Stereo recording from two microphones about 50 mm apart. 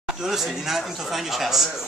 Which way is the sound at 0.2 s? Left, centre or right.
Centre.